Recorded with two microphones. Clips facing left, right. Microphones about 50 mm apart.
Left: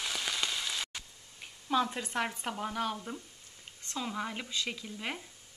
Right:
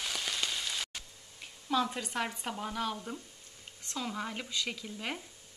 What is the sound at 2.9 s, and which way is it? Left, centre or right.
A woman's voice, centre.